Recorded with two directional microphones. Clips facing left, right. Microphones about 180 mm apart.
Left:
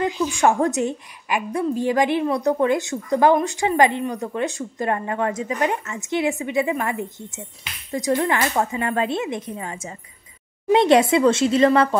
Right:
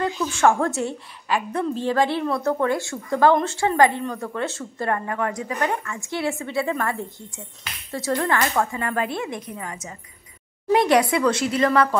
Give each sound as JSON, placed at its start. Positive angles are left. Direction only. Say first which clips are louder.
{"t": 0.0, "sound": "a woman's voice", "louder": "left 1 dB", "side_deg": 15}